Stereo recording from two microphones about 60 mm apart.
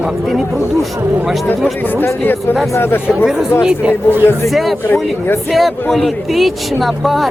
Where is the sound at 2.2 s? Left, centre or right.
Left.